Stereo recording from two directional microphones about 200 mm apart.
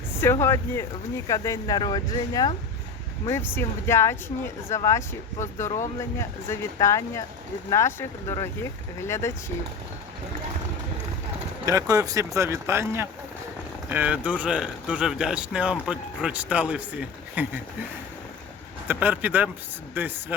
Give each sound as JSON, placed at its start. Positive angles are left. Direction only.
{"t": 0.2, "sound": "speech", "side_deg": 10}
{"t": 11.6, "sound": "speech", "side_deg": -15}
{"t": 18.9, "sound": "speech", "side_deg": -10}